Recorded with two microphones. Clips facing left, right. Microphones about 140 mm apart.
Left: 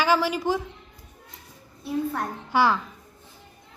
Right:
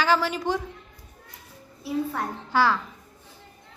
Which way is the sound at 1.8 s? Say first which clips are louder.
Left 1 dB; centre (ahead or behind).